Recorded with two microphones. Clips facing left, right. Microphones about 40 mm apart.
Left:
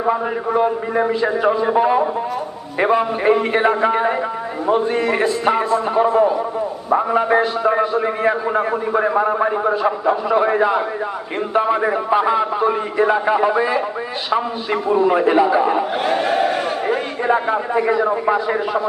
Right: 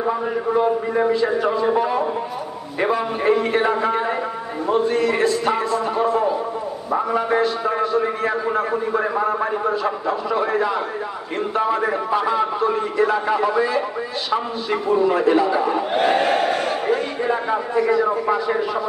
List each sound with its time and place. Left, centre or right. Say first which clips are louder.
0.0 s a man's voice: left 2 dB; left
15.9 s battle cry: right 1 dB; centre
16.5 s crowd: left 1 dB; centre
17.2 s a man's voice: left 3 dB; left